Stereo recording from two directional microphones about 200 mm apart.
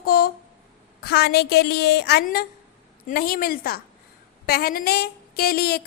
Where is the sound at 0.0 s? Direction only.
50° left (ahead or behind).